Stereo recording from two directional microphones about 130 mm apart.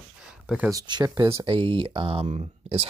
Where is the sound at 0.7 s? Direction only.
30° right (ahead or behind).